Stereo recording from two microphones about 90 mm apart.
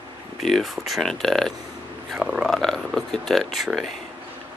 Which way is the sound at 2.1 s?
10° right (ahead or behind).